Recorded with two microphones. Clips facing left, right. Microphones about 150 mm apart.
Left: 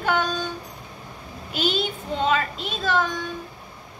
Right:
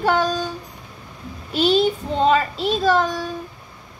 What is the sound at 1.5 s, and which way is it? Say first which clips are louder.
A woman's voice: right 8 dB; 35° right (ahead or behind).